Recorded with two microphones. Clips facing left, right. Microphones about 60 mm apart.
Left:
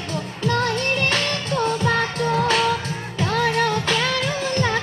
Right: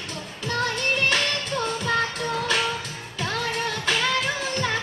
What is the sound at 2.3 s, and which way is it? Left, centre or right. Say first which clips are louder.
Music: left 6 dB; left.